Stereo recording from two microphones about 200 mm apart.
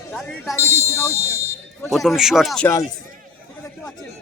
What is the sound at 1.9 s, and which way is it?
Speech, centre (ahead or behind).